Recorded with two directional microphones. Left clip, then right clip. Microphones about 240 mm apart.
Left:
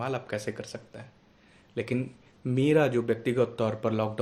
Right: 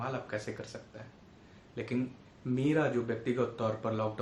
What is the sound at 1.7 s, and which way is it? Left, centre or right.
Speech, left.